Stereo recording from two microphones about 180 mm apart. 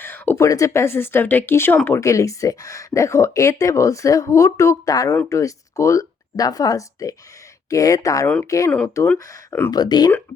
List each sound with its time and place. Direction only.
0.0 s speech: 10° left (ahead or behind)